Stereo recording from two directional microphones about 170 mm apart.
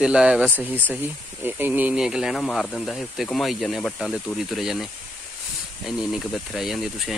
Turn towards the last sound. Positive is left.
turn(degrees=0)  # may be behind; listen again after turning